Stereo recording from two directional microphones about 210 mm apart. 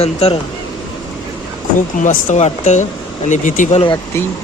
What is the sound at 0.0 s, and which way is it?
Speech, 30° left (ahead or behind).